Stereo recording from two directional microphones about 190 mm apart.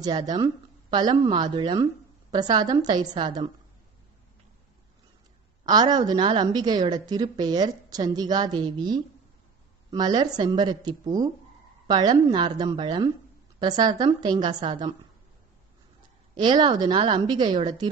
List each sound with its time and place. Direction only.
0.0 s a woman's voice: 20° right (ahead or behind)
5.7 s a woman's voice: 20° right (ahead or behind)
16.3 s a woman's voice: 25° right (ahead or behind)